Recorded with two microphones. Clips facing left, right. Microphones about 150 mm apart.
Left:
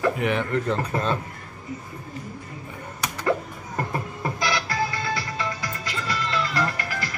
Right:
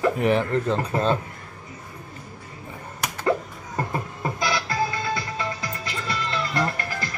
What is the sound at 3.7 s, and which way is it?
Music, 20° right (ahead or behind).